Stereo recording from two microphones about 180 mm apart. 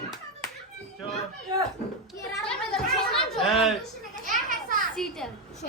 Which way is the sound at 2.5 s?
5° left (ahead or behind).